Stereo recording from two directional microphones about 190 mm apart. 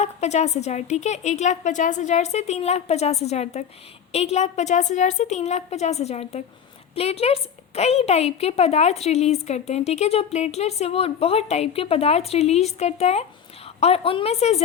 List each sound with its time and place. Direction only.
0.0 s a woman's voice: 35° left (ahead or behind)